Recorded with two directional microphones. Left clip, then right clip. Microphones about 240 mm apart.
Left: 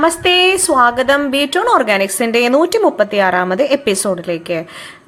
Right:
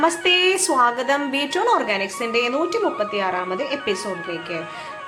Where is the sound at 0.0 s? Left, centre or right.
Left.